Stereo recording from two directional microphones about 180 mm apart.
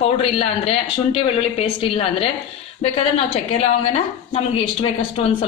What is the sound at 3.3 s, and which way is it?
A woman's voice, 35° left (ahead or behind).